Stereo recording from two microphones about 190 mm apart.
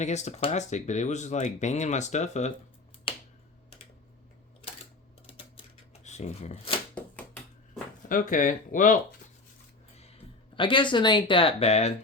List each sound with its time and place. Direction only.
0.0 s speech: 35° left (ahead or behind)
3.1 s finger snapping: 25° left (ahead or behind)
5.2 s typewriter: 30° left (ahead or behind)
8.1 s speech: 45° left (ahead or behind)
10.5 s speech: 25° left (ahead or behind)